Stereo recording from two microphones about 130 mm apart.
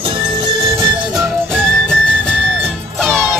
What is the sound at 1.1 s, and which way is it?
Music, 5° left (ahead or behind).